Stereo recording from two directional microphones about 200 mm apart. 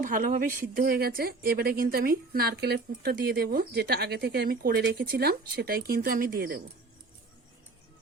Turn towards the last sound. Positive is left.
turn(degrees=-45)  # may be behind; listen again after turning